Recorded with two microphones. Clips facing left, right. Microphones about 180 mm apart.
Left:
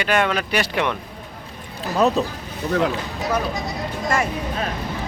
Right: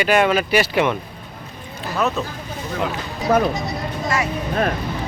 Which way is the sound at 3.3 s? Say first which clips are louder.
Right 7 dB; 50° right (ahead or behind).